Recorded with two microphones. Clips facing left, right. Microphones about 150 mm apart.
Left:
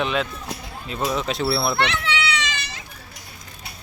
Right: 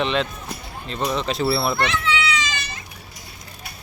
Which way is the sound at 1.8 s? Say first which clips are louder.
Right 1 dB; 70° left (ahead or behind).